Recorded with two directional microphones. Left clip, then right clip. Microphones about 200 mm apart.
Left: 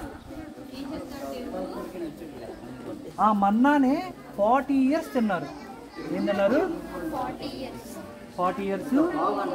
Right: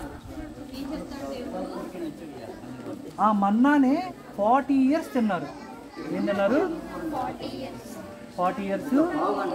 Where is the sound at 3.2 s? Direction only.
5° left (ahead or behind).